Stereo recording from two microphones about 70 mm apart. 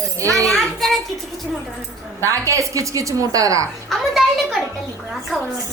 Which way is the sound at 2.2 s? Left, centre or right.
Right.